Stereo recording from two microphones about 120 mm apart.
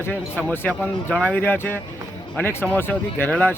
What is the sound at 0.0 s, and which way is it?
A man's voice, 15° left (ahead or behind).